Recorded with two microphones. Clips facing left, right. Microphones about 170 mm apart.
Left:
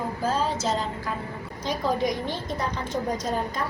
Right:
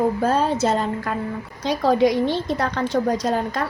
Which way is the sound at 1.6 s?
75° right (ahead or behind).